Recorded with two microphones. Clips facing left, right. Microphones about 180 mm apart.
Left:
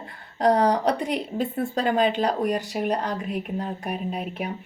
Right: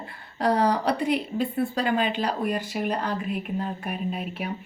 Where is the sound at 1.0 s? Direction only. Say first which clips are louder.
Right 1 dB; 40° left (ahead or behind).